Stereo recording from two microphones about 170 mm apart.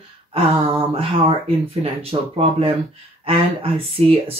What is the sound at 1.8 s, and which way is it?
Speech, 35° right (ahead or behind).